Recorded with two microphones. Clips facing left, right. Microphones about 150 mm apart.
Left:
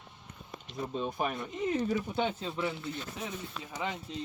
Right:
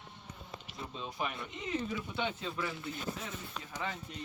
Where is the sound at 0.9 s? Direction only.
45° left (ahead or behind); by 3.9 s 20° left (ahead or behind).